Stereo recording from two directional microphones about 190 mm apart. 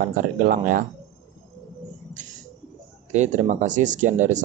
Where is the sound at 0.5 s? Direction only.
45° right (ahead or behind).